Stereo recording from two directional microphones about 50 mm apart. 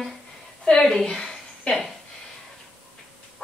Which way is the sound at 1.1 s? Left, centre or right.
Centre.